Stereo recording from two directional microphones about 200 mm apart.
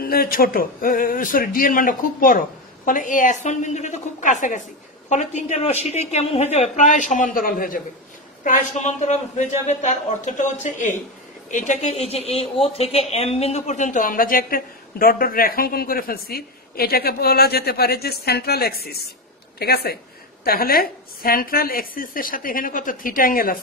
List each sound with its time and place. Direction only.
0.0 s a woman's voice: 50° left (ahead or behind)